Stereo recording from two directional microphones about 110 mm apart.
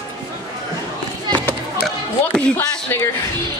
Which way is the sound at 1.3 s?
10° left (ahead or behind).